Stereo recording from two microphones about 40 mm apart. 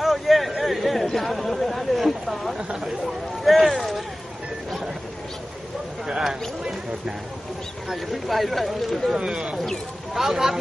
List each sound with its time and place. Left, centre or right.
0.0 s a sound: centre
0.6 s chatter: centre
1.1 s speech: centre
7.9 s speech: centre
9.1 s speech: centre